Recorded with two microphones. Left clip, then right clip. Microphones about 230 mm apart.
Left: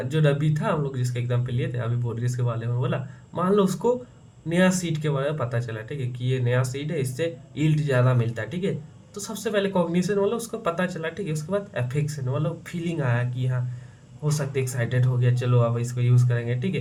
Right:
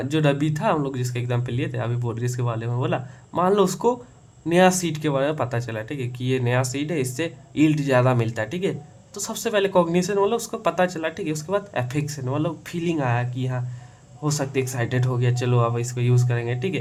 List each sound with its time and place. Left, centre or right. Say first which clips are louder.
0.1 s speech: right 3 dB; right